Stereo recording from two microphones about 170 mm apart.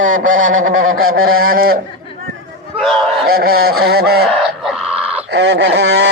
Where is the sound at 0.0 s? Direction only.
50° right (ahead or behind).